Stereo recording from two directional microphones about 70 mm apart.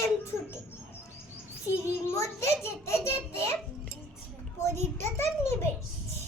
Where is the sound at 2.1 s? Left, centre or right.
Left.